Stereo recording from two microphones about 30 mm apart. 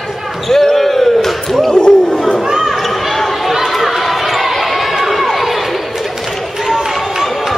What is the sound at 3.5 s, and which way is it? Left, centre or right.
Chatter, centre.